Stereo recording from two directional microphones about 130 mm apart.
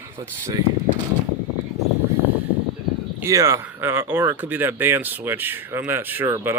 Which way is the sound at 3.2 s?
25° right (ahead or behind).